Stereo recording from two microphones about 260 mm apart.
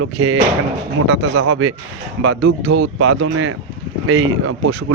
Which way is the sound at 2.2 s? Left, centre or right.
Right.